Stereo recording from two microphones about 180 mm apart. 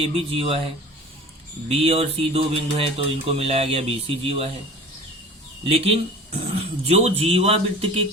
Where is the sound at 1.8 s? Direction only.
35° right (ahead or behind).